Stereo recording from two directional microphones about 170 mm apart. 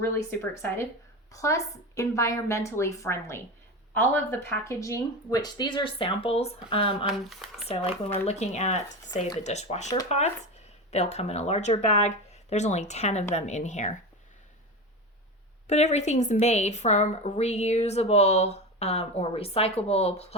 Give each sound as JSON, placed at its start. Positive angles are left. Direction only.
{"t": 0.0, "sound": "a woman's voice", "side_deg": 15}
{"t": 7.1, "sound": "speech", "side_deg": 0}
{"t": 7.8, "sound": "a woman's voice", "side_deg": 35}
{"t": 15.6, "sound": "a woman's voice", "side_deg": 40}